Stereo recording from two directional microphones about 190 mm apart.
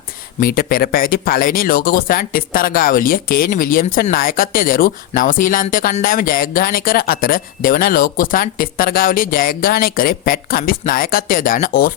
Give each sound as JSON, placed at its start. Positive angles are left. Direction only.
{"t": 0.3, "sound": "speech", "side_deg": 50}